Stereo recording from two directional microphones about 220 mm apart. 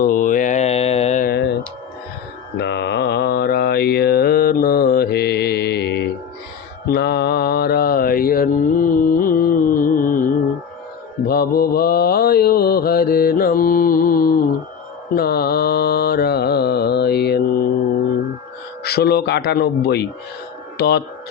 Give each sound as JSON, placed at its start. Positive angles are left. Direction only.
{"t": 0.0, "sound": "mantra", "side_deg": 35}
{"t": 2.6, "sound": "mantra", "side_deg": 50}
{"t": 11.3, "sound": "mantra", "side_deg": 45}
{"t": 18.8, "sound": "speech", "side_deg": 45}